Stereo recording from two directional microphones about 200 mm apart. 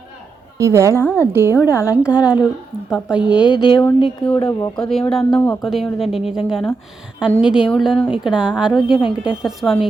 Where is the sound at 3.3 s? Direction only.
20° left (ahead or behind).